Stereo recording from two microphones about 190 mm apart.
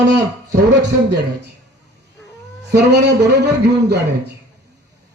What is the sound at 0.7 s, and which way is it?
Speech, 65° right (ahead or behind).